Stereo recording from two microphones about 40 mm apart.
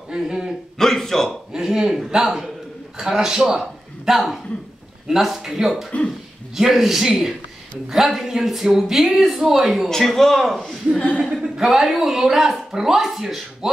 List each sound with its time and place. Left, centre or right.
0.1 s speech: centre
0.7 s a sound: centre
1.5 s a man's voice: centre
10.0 s a man's voice: centre